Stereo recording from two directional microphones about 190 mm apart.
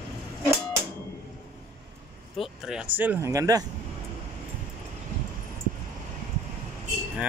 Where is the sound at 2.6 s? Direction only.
5° right (ahead or behind).